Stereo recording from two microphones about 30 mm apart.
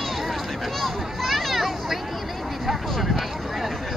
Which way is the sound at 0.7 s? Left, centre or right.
Centre.